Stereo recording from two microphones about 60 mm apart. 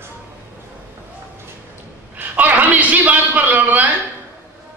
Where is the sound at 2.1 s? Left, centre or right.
Right.